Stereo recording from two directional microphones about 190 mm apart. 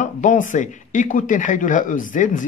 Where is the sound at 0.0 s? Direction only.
40° left (ahead or behind).